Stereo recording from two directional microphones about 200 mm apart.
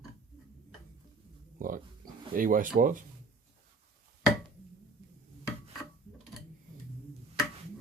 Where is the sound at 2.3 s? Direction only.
45° right (ahead or behind).